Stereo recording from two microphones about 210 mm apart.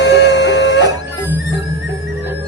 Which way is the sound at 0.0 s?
55° left (ahead or behind).